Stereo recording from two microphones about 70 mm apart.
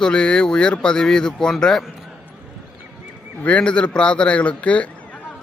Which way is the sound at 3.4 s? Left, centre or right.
Centre.